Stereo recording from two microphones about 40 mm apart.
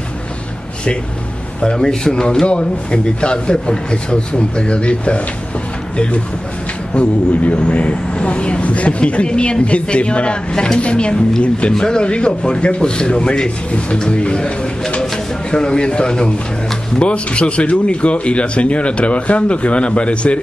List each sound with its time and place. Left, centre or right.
1.6 s a man's voice: centre
2.4 s speech: left
6.9 s speech: left
10.5 s a man's voice: centre
10.8 s speech: left